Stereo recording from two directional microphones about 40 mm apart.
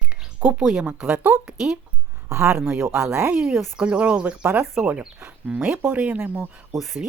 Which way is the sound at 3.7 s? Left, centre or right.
Right.